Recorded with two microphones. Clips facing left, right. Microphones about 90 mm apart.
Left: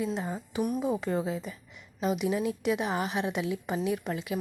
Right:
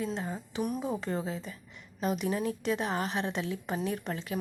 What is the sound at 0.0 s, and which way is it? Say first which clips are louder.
A woman's voice: left 2 dB; 15° left (ahead or behind).